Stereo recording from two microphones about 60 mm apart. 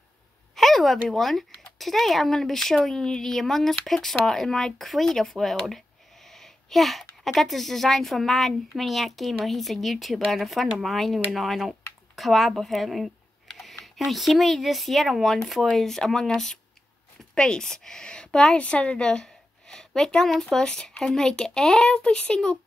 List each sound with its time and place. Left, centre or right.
0.6 s a woman's voice: centre